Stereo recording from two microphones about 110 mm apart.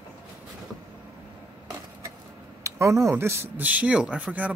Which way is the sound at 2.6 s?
30° right (ahead or behind).